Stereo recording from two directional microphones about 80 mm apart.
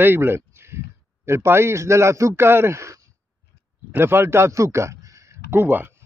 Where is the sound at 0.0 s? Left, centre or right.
Right.